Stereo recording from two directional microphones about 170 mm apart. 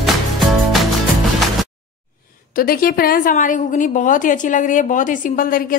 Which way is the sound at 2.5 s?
60° left (ahead or behind).